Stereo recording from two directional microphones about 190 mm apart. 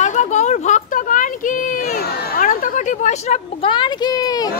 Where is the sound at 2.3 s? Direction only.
45° left (ahead or behind); by 4.5 s 20° left (ahead or behind).